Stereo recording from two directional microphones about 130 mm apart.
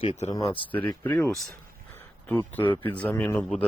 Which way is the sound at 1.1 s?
10° left (ahead or behind).